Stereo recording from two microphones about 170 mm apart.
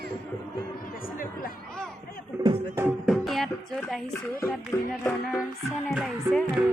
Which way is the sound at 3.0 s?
Centre (ahead or behind).